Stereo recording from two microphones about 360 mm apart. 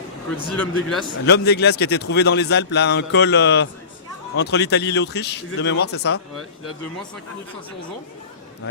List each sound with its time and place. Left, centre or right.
0.5 s speech: centre
1.2 s a man's voice: left